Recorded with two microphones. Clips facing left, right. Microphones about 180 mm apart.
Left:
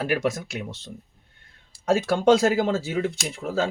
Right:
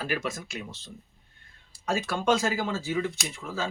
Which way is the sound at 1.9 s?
65° left (ahead or behind).